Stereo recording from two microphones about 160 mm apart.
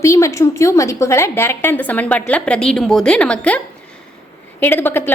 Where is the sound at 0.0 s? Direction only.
20° left (ahead or behind).